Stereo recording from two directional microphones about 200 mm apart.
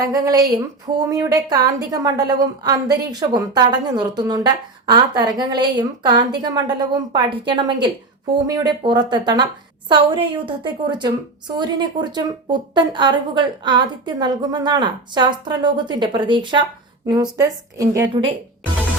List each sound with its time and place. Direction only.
0.0 s a woman's voice: 20° right (ahead or behind)